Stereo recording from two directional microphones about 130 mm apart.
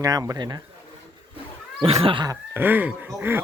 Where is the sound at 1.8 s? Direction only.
45° right (ahead or behind).